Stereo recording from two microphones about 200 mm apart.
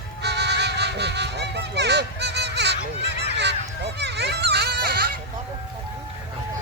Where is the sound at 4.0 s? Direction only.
55° right (ahead or behind).